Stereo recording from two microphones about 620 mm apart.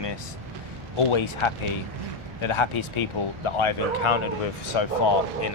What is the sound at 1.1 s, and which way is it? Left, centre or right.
Speech, left.